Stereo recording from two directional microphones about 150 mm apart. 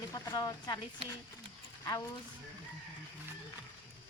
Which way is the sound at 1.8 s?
25° left (ahead or behind).